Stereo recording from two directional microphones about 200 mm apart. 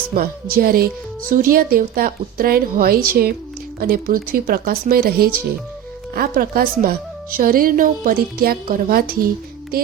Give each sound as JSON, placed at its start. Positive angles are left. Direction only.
{"t": 0.1, "sound": "a woman's voice", "side_deg": -45}